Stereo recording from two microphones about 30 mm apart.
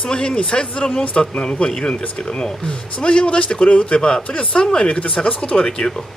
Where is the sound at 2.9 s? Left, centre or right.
Left.